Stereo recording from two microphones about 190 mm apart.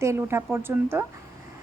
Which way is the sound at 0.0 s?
15° right (ahead or behind).